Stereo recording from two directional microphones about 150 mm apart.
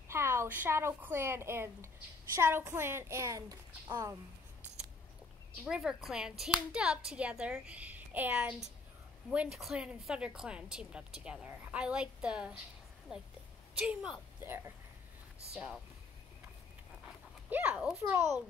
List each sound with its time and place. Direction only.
0.1 s a woman's voice: 15° right (ahead or behind)
5.7 s a woman's voice: 5° right (ahead or behind)
14.4 s a woman's voice: 15° right (ahead or behind)
15.5 s a woman's voice: 5° right (ahead or behind)
17.0 s dog: 10° right (ahead or behind)